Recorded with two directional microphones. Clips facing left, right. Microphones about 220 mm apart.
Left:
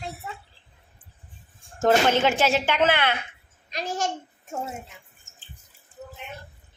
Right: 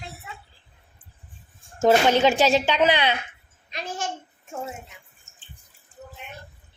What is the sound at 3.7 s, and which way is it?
Speech, 40° left (ahead or behind).